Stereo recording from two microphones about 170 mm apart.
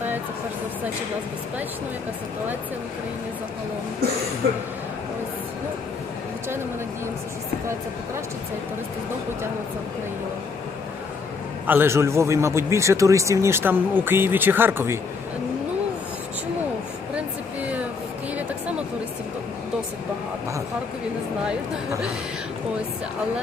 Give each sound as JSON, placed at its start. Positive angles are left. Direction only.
{"t": 11.6, "sound": "a man's voice", "side_deg": -10}